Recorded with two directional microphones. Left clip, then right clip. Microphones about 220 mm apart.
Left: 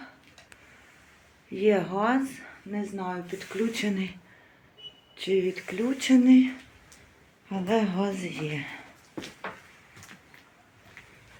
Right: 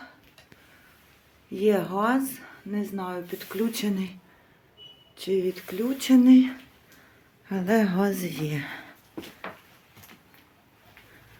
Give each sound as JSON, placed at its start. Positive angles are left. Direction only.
{"t": 1.5, "sound": "speech", "side_deg": -15}
{"t": 5.1, "sound": "speech", "side_deg": -10}
{"t": 6.0, "sound": "a woman's voice", "side_deg": -20}
{"t": 7.5, "sound": "a woman's voice", "side_deg": -30}